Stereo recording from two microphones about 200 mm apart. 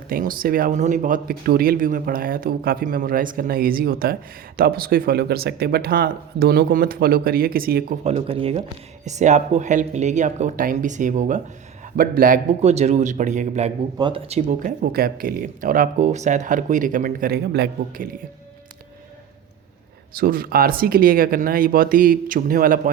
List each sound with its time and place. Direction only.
0.1 s speech: 45° right (ahead or behind)
8.0 s speech: 30° right (ahead or behind)
12.6 s speech: 35° right (ahead or behind)
20.1 s speech: 45° right (ahead or behind)